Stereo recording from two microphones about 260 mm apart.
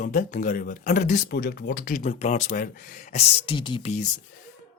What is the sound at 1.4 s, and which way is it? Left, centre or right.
Speech, left.